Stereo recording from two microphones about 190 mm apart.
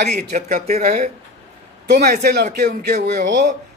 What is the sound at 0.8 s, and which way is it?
Speech, 45° right (ahead or behind).